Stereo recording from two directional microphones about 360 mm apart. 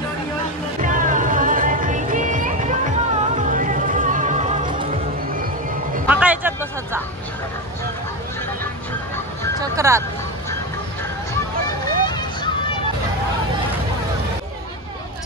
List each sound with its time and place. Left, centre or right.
0.8 s music: right
6.0 s a sound: centre
9.6 s music: centre
11.6 s vehicle: centre